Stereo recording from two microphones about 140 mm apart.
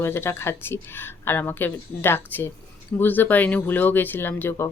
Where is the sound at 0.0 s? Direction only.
15° left (ahead or behind).